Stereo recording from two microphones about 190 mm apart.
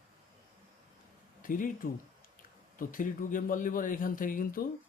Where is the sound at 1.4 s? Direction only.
45° left (ahead or behind).